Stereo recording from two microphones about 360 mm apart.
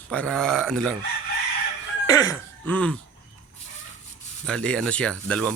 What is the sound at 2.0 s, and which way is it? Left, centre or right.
Music, centre.